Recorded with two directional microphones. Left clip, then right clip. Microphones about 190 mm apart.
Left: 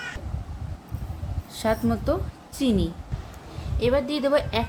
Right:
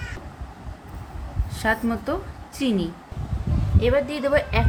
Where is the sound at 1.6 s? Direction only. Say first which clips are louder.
Right 1 dB; 10° left (ahead or behind).